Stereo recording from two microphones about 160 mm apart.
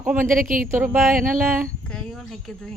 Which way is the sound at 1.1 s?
55° right (ahead or behind).